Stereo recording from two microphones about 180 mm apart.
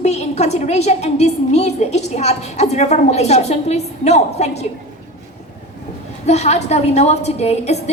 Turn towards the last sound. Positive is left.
turn(degrees=35)  # may be behind; listen again after turning